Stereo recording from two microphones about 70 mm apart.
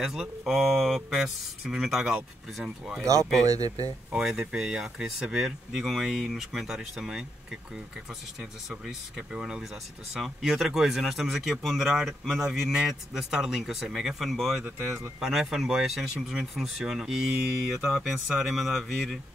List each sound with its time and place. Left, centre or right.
0.0 s speech: centre
3.4 s speech: right
4.1 s speech: centre
8.4 s speech: centre